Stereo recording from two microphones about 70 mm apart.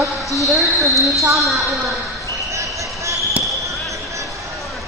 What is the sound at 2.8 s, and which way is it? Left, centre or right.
Basketball bounce, right.